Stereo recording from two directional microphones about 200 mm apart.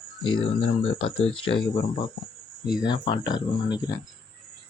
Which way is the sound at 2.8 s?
25° left (ahead or behind).